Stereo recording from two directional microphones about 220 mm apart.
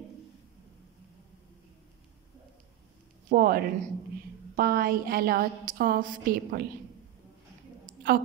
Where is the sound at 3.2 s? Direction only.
40° right (ahead or behind).